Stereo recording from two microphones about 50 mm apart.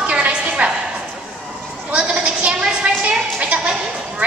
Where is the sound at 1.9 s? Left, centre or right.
Right.